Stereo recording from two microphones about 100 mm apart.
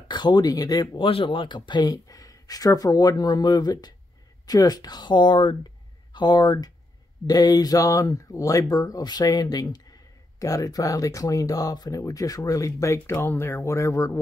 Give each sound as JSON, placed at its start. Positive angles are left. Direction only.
{"t": 0.1, "sound": "speech", "side_deg": 45}
{"t": 0.9, "sound": "speech", "side_deg": 60}